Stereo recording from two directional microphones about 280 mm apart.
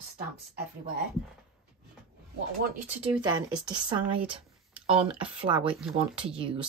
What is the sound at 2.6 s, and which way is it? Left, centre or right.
Speech, right.